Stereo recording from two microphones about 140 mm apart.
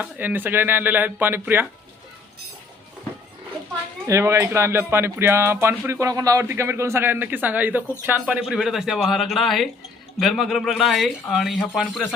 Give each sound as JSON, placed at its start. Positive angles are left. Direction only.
{"t": 0.0, "sound": "speech", "side_deg": -15}
{"t": 4.0, "sound": "speech", "side_deg": -20}